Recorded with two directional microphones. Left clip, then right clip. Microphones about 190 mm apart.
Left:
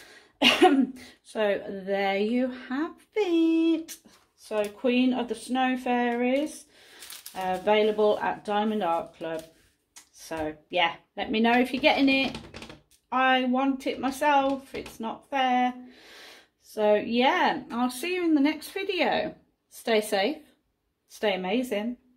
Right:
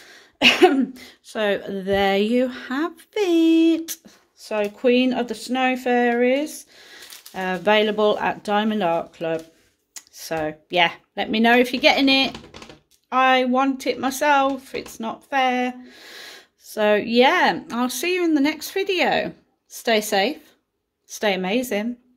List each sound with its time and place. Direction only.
0.1 s speech: 25° right (ahead or behind); by 21.8 s 50° right (ahead or behind)